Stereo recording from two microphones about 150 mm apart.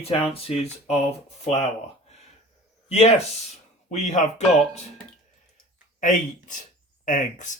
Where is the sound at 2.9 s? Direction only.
45° left (ahead or behind).